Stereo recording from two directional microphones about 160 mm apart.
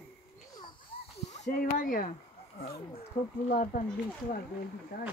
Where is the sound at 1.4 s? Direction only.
55° left (ahead or behind).